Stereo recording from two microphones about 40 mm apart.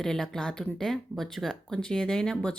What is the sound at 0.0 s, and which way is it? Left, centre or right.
Speech, centre.